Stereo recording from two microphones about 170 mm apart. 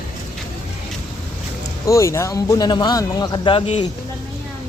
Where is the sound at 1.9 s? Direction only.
15° left (ahead or behind).